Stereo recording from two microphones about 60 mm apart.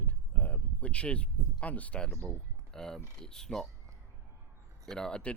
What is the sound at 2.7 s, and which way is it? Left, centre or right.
Speech, centre.